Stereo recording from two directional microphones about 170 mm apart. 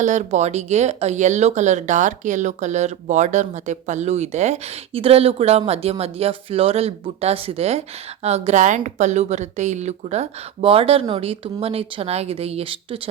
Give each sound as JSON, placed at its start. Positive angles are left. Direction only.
{"t": 0.0, "sound": "speech", "side_deg": -45}